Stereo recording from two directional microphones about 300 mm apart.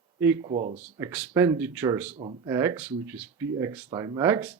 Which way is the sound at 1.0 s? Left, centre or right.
Centre.